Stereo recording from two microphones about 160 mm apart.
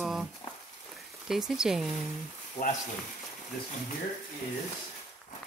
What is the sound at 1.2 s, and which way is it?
Speech, 5° right (ahead or behind).